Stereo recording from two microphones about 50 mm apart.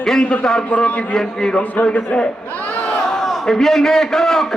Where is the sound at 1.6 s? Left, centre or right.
Left.